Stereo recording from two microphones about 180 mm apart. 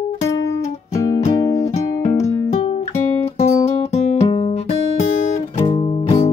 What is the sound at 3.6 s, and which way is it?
Guitar, 35° left (ahead or behind).